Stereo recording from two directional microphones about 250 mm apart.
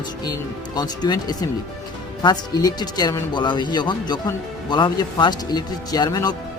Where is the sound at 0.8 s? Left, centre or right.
Centre.